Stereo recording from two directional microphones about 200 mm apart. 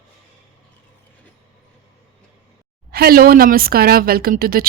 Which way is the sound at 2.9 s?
50° right (ahead or behind).